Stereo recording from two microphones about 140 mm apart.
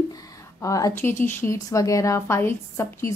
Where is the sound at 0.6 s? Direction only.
25° left (ahead or behind).